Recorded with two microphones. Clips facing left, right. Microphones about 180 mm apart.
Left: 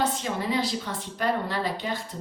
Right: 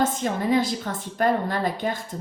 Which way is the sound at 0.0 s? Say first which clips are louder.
Right 4 dB; 50° right (ahead or behind).